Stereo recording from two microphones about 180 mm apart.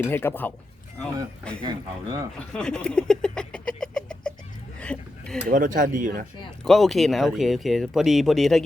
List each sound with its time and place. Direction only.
0.0 s speech: 10° left (ahead or behind)
1.6 s speech: 25° right (ahead or behind)
2.5 s speech: 5° left (ahead or behind)
4.8 s a sound: 5° left (ahead or behind)
5.5 s speech: 45° right (ahead or behind)
6.7 s speech: centre (ahead or behind)